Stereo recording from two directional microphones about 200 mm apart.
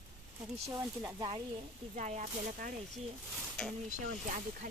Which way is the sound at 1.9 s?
35° right (ahead or behind).